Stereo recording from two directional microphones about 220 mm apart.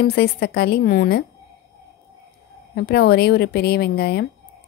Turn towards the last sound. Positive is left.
turn(degrees=45)  # may be behind; listen again after turning